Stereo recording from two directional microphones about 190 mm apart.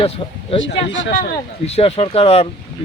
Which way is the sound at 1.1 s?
40° left (ahead or behind).